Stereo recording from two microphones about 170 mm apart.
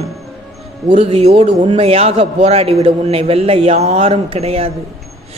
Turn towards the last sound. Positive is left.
turn(degrees=-35)  # may be behind; listen again after turning